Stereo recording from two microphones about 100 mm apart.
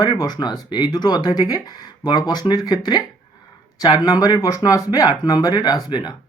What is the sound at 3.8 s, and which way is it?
Speech, 40° left (ahead or behind).